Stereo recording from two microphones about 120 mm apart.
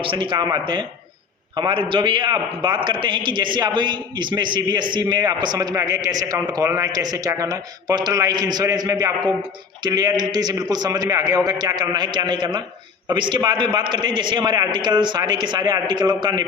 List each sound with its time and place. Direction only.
0.0 s a man's voice: 45° right (ahead or behind)